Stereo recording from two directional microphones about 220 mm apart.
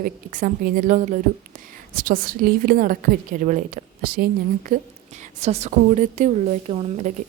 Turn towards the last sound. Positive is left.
turn(degrees=-30)  # may be behind; listen again after turning